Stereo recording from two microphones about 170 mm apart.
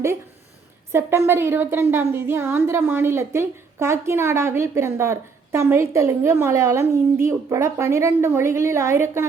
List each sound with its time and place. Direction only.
0.9 s speech: 15° right (ahead or behind)